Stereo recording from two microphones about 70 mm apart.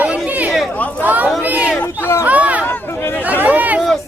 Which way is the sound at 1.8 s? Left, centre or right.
Left.